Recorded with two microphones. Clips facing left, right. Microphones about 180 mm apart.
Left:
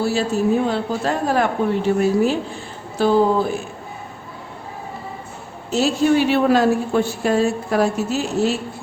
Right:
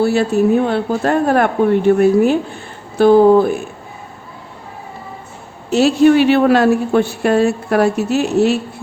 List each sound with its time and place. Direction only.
0.0 s a woman's voice: 60° right (ahead or behind)
5.7 s a woman's voice: 65° right (ahead or behind)